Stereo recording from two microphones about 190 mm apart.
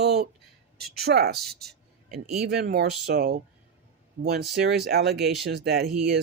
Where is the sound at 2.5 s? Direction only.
55° right (ahead or behind).